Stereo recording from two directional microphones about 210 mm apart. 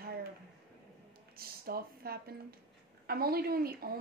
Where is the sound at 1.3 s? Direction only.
45° right (ahead or behind).